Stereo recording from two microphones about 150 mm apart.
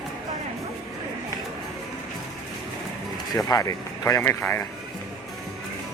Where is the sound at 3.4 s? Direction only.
25° left (ahead or behind).